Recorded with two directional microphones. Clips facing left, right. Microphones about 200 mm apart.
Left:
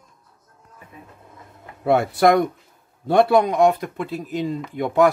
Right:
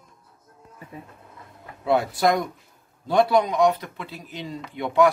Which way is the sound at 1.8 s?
55° left (ahead or behind).